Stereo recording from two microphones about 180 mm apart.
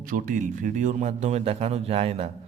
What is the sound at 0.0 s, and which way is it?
A man's voice, 50° right (ahead or behind).